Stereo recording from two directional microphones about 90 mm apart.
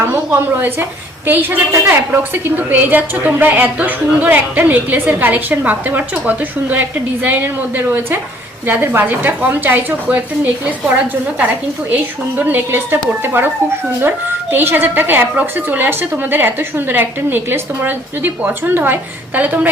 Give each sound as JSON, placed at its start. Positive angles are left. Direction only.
{"t": 0.0, "sound": "a woman's voice", "side_deg": -25}
{"t": 12.4, "sound": "a woman's voice", "side_deg": -20}
{"t": 14.5, "sound": "a woman's voice", "side_deg": -25}